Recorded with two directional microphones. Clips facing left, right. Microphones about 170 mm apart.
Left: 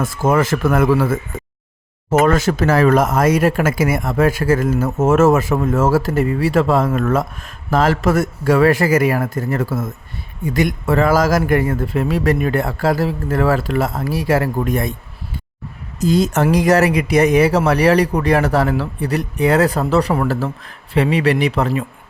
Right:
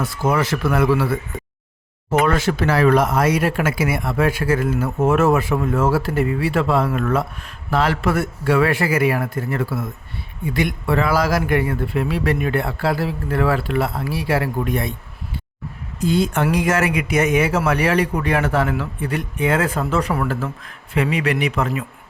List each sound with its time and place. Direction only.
0.0 s speech: 45° left (ahead or behind)
16.0 s speech: 40° left (ahead or behind)